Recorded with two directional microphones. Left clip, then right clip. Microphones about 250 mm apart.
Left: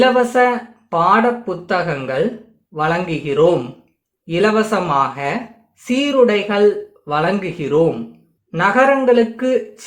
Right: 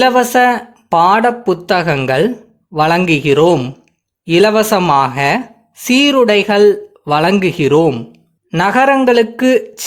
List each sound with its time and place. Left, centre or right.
0.0 s speech: right